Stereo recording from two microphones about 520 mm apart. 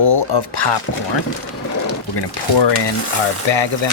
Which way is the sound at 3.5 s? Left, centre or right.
Left.